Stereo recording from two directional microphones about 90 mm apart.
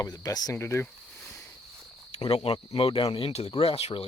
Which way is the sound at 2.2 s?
90° left.